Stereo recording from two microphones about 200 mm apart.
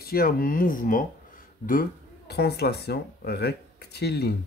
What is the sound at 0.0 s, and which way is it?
Speech, 45° left (ahead or behind).